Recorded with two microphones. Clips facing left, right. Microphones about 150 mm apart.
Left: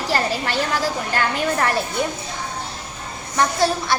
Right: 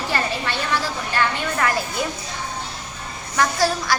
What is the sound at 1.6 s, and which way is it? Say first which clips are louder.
Speech: right 1 dB; 30° left (ahead or behind).